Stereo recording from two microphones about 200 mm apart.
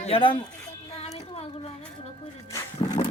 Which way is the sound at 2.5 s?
15° left (ahead or behind).